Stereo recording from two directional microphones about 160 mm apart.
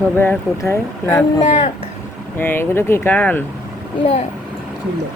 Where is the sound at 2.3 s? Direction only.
15° left (ahead or behind).